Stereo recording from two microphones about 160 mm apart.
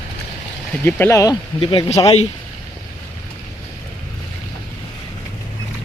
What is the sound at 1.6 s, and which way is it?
Speech, 30° left (ahead or behind).